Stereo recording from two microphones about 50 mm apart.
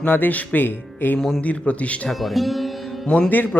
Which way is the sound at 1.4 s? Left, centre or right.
Left.